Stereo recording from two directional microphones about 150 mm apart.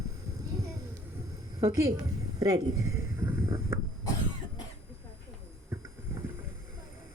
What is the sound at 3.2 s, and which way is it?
Mechanisms, 15° right (ahead or behind).